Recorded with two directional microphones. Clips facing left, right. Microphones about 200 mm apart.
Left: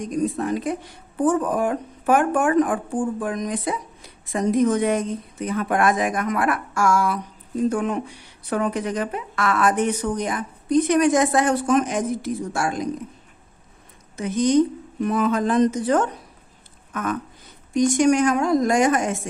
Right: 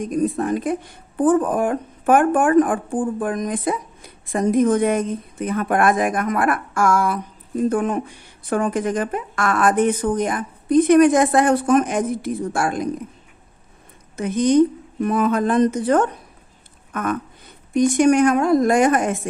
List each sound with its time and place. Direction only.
0.0 s speech: 55° right (ahead or behind)
14.2 s a woman's voice: 55° right (ahead or behind)